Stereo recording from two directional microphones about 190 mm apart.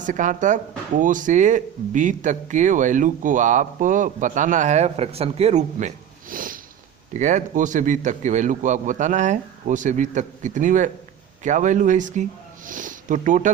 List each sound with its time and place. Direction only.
0.0 s speech: 40° right (ahead or behind)